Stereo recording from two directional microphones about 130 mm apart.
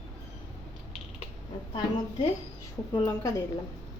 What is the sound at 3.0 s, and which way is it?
Speech, 25° left (ahead or behind).